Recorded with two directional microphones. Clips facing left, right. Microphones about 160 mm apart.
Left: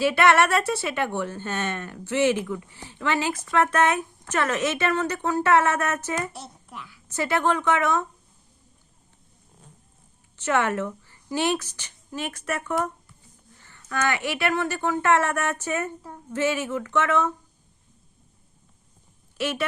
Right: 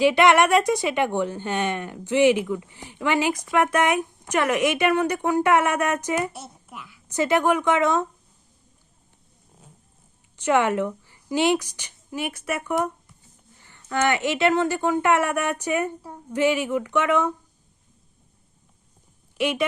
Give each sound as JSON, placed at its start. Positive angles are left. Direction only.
{"t": 0.0, "sound": "a woman's voice", "side_deg": -15}
{"t": 6.3, "sound": "a child's voice", "side_deg": -5}
{"t": 7.1, "sound": "a woman's voice", "side_deg": -15}
{"t": 10.3, "sound": "speech", "side_deg": -15}
{"t": 13.6, "sound": "a sound", "side_deg": -15}
{"t": 13.8, "sound": "a woman's voice", "side_deg": -25}
{"t": 19.4, "sound": "a woman's voice", "side_deg": -15}